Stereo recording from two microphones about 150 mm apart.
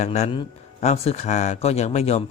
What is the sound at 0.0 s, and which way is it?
Speech, 50° left (ahead or behind).